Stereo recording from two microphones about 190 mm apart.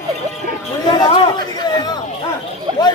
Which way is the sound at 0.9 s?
20° left (ahead or behind).